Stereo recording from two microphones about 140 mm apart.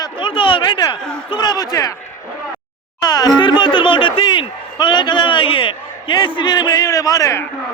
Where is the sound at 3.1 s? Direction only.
30° left (ahead or behind).